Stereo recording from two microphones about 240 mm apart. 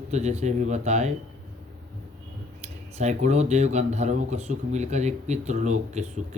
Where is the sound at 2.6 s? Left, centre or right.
Right.